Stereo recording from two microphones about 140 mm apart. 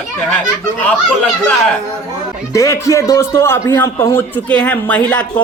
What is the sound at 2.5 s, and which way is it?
A man's voice, 20° left (ahead or behind).